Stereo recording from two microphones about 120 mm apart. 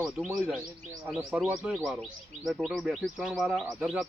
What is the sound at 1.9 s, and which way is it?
Speech, centre (ahead or behind).